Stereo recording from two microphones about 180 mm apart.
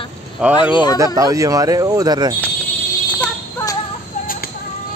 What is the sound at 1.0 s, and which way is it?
Speech, 20° right (ahead or behind).